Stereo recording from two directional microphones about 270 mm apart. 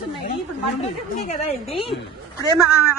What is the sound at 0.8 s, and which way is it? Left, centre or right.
Speech, left.